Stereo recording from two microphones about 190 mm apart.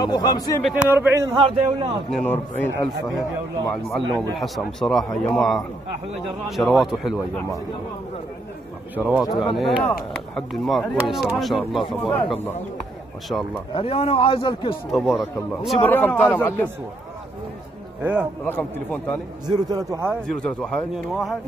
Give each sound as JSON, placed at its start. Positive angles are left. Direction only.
{"t": 0.0, "sound": "a man's voice", "side_deg": 20}
{"t": 0.7, "sound": "a man's voice", "side_deg": -10}
{"t": 2.0, "sound": "a man's voice", "side_deg": 5}
{"t": 8.9, "sound": "a man's voice", "side_deg": -5}
{"t": 13.7, "sound": "a man's voice", "side_deg": 30}
{"t": 14.9, "sound": "a man's voice", "side_deg": 0}
{"t": 15.8, "sound": "a man's voice", "side_deg": 10}
{"t": 18.0, "sound": "a man's voice", "side_deg": -5}
{"t": 18.4, "sound": "a man's voice", "side_deg": 10}
{"t": 19.4, "sound": "a man's voice", "side_deg": -20}
{"t": 20.2, "sound": "a man's voice", "side_deg": 5}